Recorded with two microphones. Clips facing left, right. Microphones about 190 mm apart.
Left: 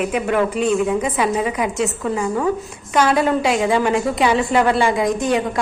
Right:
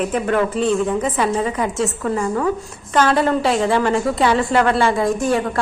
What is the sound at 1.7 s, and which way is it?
A woman's voice, centre (ahead or behind).